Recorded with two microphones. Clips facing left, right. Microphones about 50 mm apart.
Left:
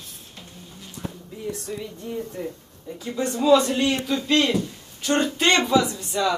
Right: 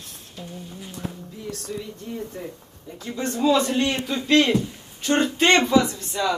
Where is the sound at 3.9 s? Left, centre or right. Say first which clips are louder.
Left 2 dB; centre.